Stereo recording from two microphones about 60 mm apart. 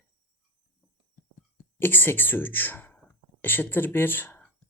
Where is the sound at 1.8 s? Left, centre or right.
Left.